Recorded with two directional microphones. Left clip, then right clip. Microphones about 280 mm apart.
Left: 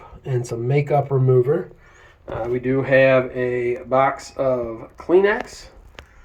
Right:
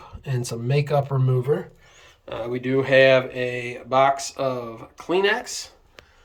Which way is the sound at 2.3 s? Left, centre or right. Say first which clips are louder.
Left 2 dB; centre.